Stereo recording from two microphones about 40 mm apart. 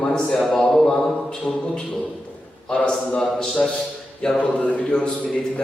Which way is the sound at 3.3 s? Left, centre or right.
Centre.